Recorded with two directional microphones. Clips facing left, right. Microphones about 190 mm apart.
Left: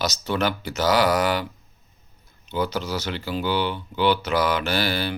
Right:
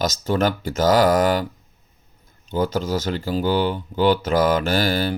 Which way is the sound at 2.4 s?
45° right (ahead or behind).